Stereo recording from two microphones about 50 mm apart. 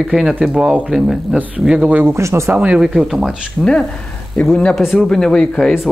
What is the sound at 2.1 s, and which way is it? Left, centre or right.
Speech, right.